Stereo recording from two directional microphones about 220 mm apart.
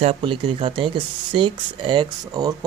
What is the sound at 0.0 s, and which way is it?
Speech, 25° right (ahead or behind).